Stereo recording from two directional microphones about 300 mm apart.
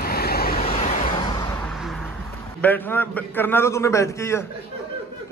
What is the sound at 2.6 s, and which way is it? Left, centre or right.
A man's voice, centre.